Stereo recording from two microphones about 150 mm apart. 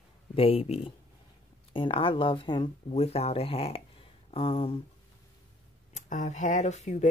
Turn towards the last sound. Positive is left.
turn(degrees=50)  # may be behind; listen again after turning